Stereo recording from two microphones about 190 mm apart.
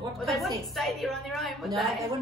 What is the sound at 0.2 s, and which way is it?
A woman's voice, centre (ahead or behind).